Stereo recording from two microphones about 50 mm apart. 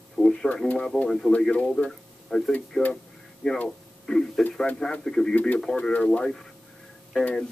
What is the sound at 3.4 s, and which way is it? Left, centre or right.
Speech, centre.